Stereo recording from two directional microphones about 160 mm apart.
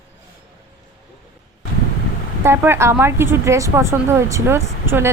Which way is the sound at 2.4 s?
15° right (ahead or behind).